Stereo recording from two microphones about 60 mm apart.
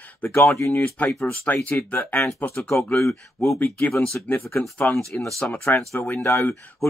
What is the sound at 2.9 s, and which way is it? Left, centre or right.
Speech, left.